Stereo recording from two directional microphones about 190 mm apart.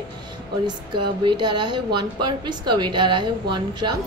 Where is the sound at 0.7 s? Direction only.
25° right (ahead or behind).